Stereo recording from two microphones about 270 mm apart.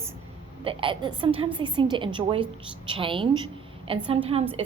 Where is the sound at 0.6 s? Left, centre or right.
Centre.